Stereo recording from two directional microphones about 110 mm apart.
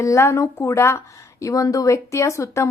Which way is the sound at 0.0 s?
25° left (ahead or behind).